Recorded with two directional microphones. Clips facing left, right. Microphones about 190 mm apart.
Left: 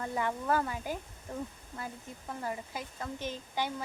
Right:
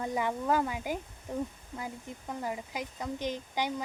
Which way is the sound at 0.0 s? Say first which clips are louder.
Right 2 dB; 15° right (ahead or behind).